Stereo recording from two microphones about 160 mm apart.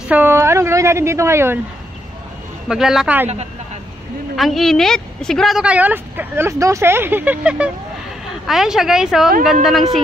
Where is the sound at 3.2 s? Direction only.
40° right (ahead or behind).